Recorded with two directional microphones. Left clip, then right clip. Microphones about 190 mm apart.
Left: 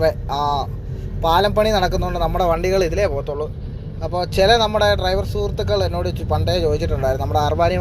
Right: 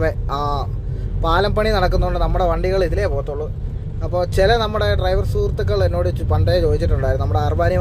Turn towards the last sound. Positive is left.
turn(degrees=-15)  # may be behind; listen again after turning